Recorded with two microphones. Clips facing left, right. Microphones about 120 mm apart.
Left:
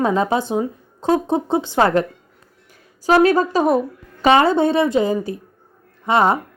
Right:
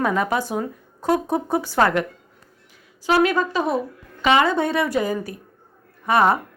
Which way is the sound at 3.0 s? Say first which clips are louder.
Left 5 dB; 40° left (ahead or behind).